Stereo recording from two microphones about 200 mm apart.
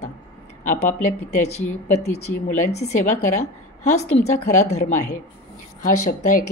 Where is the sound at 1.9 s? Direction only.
35° left (ahead or behind).